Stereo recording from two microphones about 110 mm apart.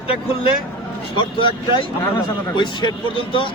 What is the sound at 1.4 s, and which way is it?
Speech, 50° left (ahead or behind).